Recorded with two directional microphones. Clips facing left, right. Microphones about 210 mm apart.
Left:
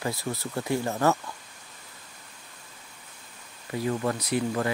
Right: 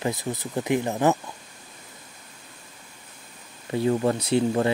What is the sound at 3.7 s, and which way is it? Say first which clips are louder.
Speech: right 5 dB; 25° right (ahead or behind).